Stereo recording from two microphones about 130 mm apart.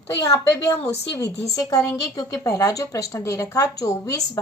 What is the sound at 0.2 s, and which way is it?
A woman's voice, 25° left (ahead or behind).